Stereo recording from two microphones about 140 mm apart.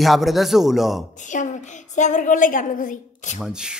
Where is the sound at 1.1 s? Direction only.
60° left (ahead or behind).